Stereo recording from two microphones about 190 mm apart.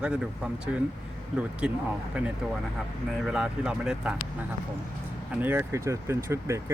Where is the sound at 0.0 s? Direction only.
5° right (ahead or behind).